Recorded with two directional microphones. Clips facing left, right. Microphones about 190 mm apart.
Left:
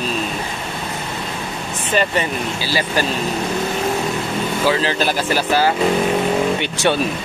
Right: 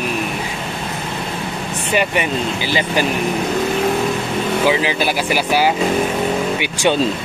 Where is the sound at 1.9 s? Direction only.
15° right (ahead or behind).